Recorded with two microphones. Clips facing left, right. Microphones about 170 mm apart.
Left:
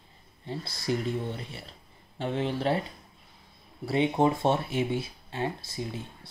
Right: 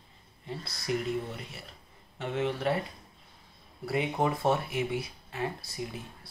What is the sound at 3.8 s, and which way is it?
Speech, 25° left (ahead or behind).